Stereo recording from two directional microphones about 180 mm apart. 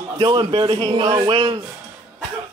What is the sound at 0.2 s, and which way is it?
A man's voice, 20° right (ahead or behind).